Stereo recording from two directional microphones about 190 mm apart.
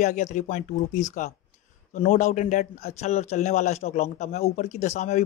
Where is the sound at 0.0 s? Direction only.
40° left (ahead or behind).